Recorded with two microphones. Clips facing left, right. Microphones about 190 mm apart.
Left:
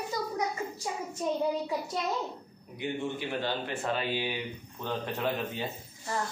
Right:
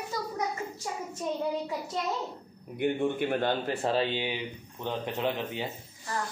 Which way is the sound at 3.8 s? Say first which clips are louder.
Right 3 dB; 30° right (ahead or behind).